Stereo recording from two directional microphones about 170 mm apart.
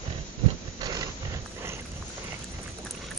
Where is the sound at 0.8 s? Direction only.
20° right (ahead or behind).